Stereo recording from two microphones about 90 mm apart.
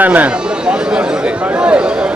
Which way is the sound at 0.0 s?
15° right (ahead or behind).